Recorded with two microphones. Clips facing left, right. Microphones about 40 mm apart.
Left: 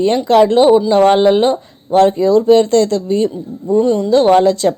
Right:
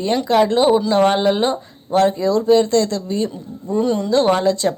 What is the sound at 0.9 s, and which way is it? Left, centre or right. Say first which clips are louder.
Speech: left 5 dB; left.